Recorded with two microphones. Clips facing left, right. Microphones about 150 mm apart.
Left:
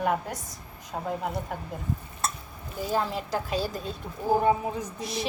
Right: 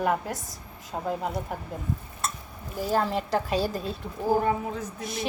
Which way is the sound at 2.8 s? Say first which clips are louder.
Right 2 dB; 5° right (ahead or behind).